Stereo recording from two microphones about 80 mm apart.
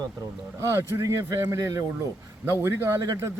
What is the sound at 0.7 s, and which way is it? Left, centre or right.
A man's voice, right.